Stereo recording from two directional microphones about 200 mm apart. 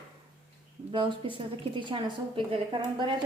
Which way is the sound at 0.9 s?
25° right (ahead or behind).